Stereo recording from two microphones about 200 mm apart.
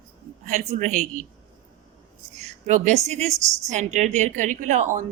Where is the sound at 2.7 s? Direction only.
35° right (ahead or behind).